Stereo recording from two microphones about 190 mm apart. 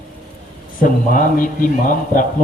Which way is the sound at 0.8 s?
45° left (ahead or behind).